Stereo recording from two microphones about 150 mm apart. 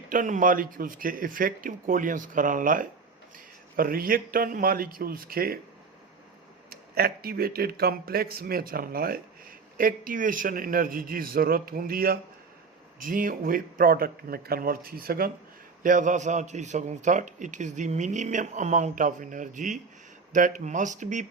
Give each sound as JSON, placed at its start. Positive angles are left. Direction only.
{"t": 0.1, "sound": "a man's voice", "side_deg": -60}
{"t": 6.7, "sound": "speech", "side_deg": -90}
{"t": 9.7, "sound": "a man's voice", "side_deg": -70}
{"t": 13.0, "sound": "a man's voice", "side_deg": -65}
{"t": 15.8, "sound": "a man's voice", "side_deg": -60}